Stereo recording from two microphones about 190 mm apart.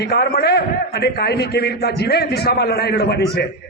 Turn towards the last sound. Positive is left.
turn(degrees=55)  # may be behind; listen again after turning